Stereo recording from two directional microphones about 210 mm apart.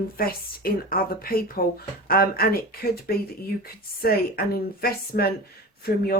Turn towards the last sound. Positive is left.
turn(degrees=45)  # may be behind; listen again after turning